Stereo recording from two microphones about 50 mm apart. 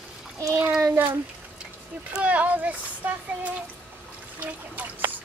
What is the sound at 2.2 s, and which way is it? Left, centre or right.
Speech, right.